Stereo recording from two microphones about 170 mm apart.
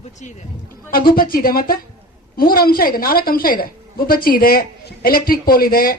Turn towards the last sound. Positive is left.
turn(degrees=60)  # may be behind; listen again after turning